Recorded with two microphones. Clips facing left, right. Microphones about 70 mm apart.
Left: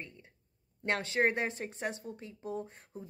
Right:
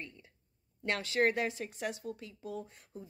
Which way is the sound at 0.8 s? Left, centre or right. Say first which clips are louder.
Even; left.